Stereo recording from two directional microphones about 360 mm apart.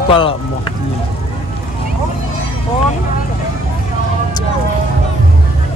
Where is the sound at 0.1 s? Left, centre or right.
Centre.